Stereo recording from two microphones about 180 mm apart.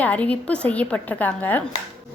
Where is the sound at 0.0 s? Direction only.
10° left (ahead or behind).